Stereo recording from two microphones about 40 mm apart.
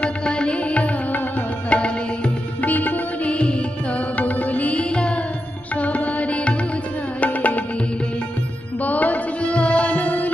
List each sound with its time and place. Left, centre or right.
0.0 s music: left
2.7 s music: left
8.8 s music: left
9.5 s music: left